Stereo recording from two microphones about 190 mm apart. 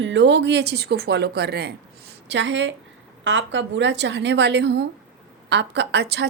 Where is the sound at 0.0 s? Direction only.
70° right (ahead or behind).